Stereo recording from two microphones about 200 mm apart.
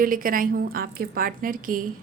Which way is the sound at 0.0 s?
45° right (ahead or behind).